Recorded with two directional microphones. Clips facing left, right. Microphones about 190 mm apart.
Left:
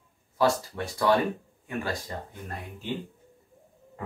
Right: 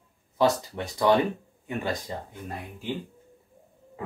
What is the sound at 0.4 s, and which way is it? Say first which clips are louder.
Speech: right 1 dB; 20° right (ahead or behind).